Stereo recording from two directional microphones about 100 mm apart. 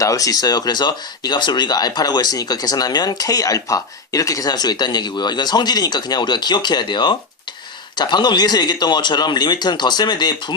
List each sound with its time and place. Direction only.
0.0 s speech: 35° left (ahead or behind)